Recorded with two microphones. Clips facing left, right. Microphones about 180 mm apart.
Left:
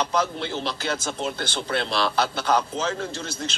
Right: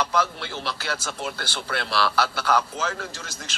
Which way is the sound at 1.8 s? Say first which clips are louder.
Even; 20° left (ahead or behind).